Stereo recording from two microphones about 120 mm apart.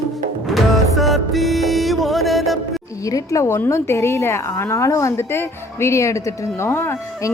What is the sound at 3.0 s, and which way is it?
A woman's voice, 30° left (ahead or behind).